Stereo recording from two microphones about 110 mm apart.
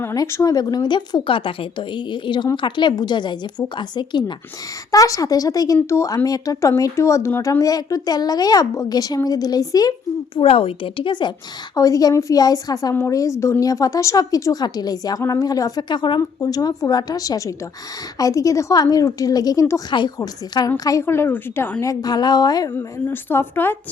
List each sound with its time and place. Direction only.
0.1 s a woman's voice: 30° left (ahead or behind)
4.9 s speech: 30° left (ahead or behind)
7.6 s a woman's voice: 35° left (ahead or behind)
10.3 s a woman's voice: 60° left (ahead or behind)
11.7 s a woman's voice: 30° left (ahead or behind)
21.0 s speech: 20° left (ahead or behind)
21.8 s a woman's voice: 35° left (ahead or behind)
22.7 s speech: 20° left (ahead or behind)